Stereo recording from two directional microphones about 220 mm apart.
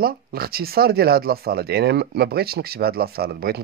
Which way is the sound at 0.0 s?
45° right (ahead or behind).